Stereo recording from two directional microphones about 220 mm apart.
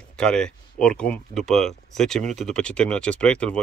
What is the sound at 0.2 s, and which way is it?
Speech, 5° left (ahead or behind).